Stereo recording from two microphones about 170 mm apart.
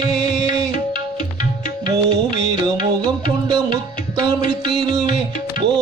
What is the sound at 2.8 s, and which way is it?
Music, 25° right (ahead or behind).